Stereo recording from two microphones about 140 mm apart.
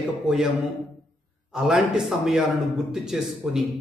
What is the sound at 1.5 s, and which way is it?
Speech, 5° right (ahead or behind).